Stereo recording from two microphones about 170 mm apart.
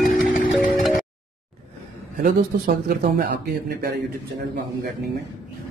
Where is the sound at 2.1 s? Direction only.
60° right (ahead or behind).